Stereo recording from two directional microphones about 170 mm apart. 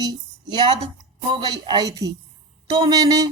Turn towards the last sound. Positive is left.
turn(degrees=-20)  # may be behind; listen again after turning